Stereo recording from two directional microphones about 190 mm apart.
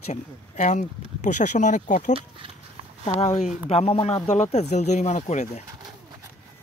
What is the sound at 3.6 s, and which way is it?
Speech, 30° left (ahead or behind).